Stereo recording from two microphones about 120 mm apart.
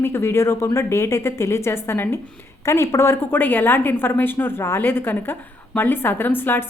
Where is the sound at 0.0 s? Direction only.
20° left (ahead or behind).